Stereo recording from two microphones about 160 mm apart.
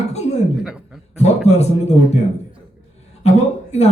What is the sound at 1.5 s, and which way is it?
Speech, 45° left (ahead or behind).